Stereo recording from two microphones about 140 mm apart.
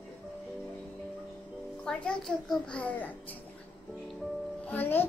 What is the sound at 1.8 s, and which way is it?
A woman's voice, 5° left (ahead or behind).